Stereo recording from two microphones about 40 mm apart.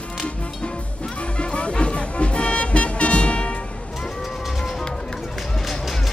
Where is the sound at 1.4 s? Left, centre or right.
Left.